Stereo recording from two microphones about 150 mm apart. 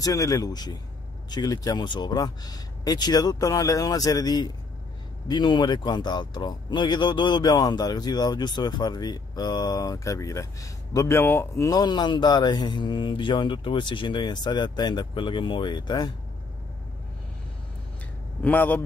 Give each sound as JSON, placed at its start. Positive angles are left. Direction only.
{"t": 0.0, "sound": "speech", "side_deg": 25}
{"t": 18.4, "sound": "a man's voice", "side_deg": 10}